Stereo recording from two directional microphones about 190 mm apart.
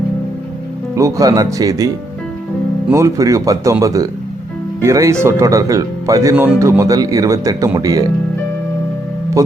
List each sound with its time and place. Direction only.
0.9 s speech: 15° right (ahead or behind)
2.9 s speech: 15° right (ahead or behind)